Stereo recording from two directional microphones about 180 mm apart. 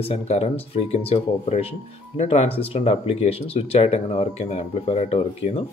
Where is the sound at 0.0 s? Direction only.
35° left (ahead or behind).